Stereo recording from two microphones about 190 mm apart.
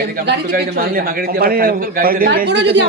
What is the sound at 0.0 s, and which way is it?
A man's voice, 50° right (ahead or behind).